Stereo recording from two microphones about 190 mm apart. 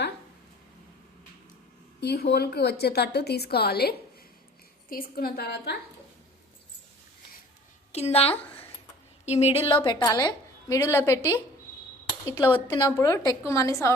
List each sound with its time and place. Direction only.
2.0 s a woman's voice: 60° left (ahead or behind)
7.9 s a woman's voice: 35° left (ahead or behind); by 11.3 s 15° left (ahead or behind)
12.6 s a woman's voice: 20° left (ahead or behind)